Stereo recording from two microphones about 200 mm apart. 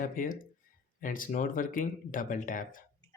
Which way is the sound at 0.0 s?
40° left (ahead or behind).